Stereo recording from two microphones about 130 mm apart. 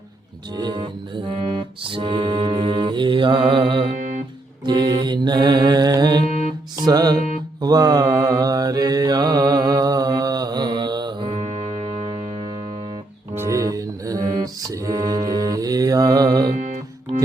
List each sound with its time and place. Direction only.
0.5 s mantra: 35° right (ahead or behind)
6.2 s music: 60° left (ahead or behind)
6.8 s mantra: 30° right (ahead or behind); by 12.1 s 50° right (ahead or behind)
13.3 s music: 20° right (ahead or behind)